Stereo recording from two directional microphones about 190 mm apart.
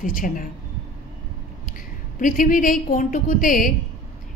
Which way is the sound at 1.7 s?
45° left (ahead or behind).